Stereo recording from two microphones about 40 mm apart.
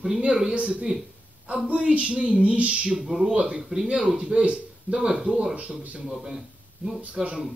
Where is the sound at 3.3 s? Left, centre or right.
Centre.